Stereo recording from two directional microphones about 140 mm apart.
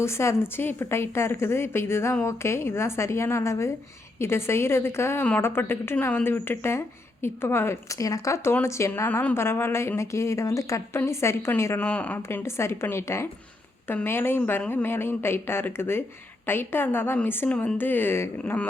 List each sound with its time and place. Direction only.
0.0 s a woman's voice: 20° left (ahead or behind)